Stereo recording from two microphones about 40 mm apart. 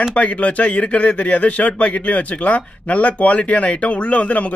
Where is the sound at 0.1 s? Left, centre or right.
Left.